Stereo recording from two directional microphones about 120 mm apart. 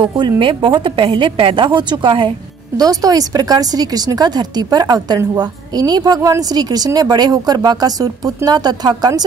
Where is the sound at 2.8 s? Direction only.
30° right (ahead or behind).